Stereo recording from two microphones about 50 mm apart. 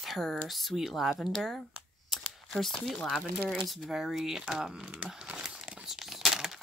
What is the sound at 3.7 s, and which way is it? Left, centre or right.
Speech, centre.